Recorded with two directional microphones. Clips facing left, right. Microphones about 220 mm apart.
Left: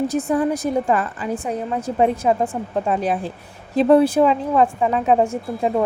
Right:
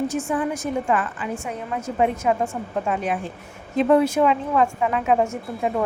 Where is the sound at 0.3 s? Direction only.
35° left (ahead or behind).